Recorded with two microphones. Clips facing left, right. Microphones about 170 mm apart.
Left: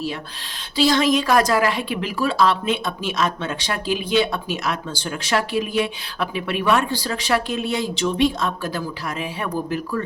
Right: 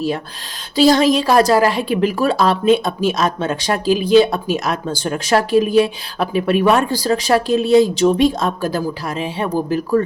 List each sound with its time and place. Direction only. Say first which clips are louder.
0.8 s speech: right 5 dB; 40° right (ahead or behind)